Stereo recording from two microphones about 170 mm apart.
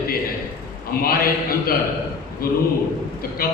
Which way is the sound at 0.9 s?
60° left (ahead or behind).